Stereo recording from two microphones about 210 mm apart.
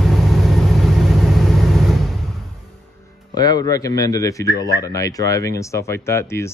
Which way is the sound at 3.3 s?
20° left (ahead or behind).